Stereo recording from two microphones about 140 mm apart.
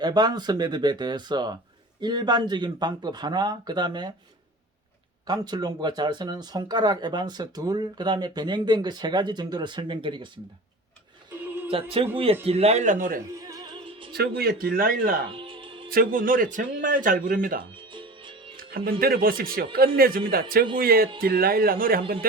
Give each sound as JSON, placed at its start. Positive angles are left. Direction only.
{"t": 0.0, "sound": "speech", "side_deg": -30}
{"t": 5.2, "sound": "speech", "side_deg": -30}
{"t": 11.7, "sound": "speech", "side_deg": -40}
{"t": 13.3, "sound": "music", "side_deg": -25}
{"t": 14.3, "sound": "a man's voice", "side_deg": -90}
{"t": 15.3, "sound": "music", "side_deg": -40}
{"t": 15.9, "sound": "speech", "side_deg": -90}
{"t": 18.9, "sound": "a man's voice", "side_deg": -90}